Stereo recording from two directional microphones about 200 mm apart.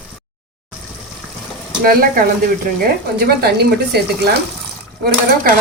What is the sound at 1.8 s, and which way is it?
Speech, 45° right (ahead or behind).